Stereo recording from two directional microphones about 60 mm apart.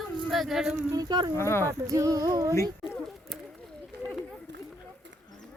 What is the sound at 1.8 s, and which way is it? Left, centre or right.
Speech, right.